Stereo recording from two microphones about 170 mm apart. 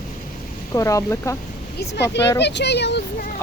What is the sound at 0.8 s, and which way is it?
Speech, 20° left (ahead or behind).